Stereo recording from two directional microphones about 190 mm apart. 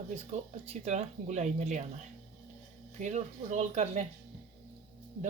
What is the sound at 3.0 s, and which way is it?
Speech, 35° right (ahead or behind).